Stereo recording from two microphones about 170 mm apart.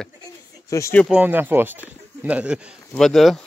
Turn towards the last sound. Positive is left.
turn(degrees=0)  # may be behind; listen again after turning